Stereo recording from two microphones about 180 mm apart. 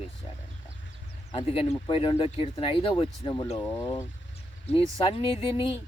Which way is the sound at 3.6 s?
15° left (ahead or behind).